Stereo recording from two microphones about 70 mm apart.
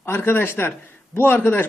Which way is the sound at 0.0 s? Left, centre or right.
Left.